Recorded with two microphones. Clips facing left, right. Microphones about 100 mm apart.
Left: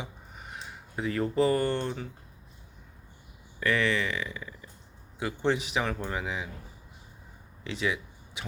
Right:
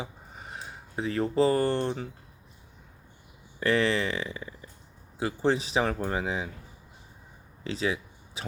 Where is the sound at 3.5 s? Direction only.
30° right (ahead or behind).